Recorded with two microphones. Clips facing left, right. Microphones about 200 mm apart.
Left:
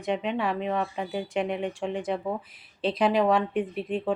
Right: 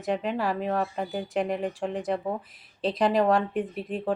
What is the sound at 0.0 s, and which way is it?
Speech, centre (ahead or behind).